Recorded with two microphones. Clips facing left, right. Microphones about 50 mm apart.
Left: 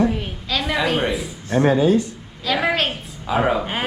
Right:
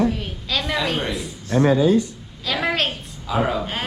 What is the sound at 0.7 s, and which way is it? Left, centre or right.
Speech, centre.